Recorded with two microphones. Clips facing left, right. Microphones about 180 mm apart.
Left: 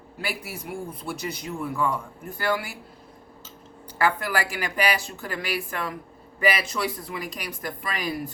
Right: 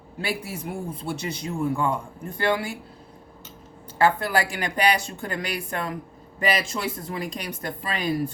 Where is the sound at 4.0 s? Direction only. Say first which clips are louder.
Right 3 dB; 25° right (ahead or behind).